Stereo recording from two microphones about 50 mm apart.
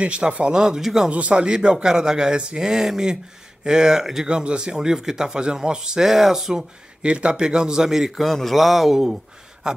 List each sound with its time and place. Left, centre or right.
0.0 s speech: right
1.1 s speech: right
7.0 s speech: right
8.2 s a man's voice: centre